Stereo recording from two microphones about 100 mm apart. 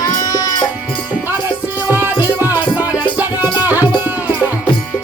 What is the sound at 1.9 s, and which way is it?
Music, 20° right (ahead or behind).